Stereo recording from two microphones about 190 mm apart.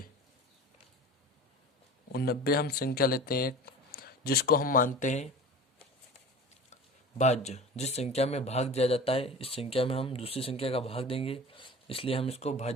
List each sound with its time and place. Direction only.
2.1 s speech: 55° left (ahead or behind)
7.2 s speech: 35° left (ahead or behind)